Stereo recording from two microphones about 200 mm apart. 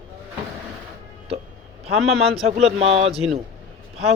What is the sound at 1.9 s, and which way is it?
Speech, centre (ahead or behind).